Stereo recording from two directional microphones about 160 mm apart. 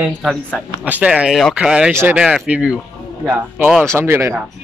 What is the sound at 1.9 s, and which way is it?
Speech, 15° right (ahead or behind).